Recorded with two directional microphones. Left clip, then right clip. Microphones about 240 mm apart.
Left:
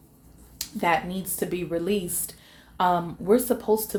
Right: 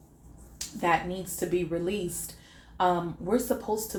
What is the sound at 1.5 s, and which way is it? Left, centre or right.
Speech, left.